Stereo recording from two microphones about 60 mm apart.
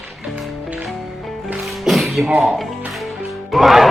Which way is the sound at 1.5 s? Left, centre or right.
Centre.